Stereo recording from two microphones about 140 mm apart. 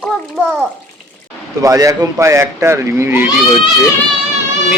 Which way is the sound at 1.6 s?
25° right (ahead or behind).